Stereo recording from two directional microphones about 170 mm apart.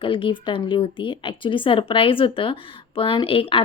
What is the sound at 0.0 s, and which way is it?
A woman's voice, 30° left (ahead or behind).